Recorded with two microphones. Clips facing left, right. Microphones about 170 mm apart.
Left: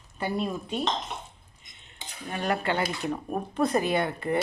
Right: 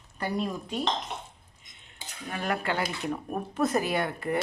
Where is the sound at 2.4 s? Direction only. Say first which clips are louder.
Left 2 dB; centre (ahead or behind).